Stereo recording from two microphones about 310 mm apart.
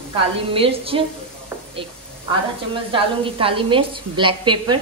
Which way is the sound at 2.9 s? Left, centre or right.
Centre.